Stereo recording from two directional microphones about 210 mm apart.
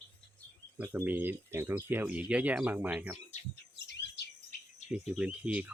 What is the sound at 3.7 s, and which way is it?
Bird, 55° left (ahead or behind).